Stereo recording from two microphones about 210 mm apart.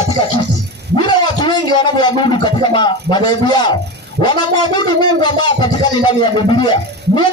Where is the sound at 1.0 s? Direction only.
20° left (ahead or behind).